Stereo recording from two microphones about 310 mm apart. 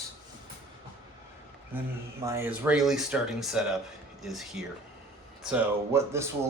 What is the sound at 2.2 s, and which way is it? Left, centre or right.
Speech, centre.